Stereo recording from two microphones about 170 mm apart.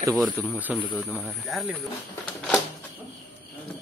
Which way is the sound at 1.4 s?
Centre (ahead or behind).